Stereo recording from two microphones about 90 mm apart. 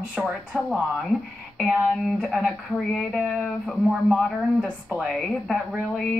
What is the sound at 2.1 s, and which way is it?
Speech, centre (ahead or behind).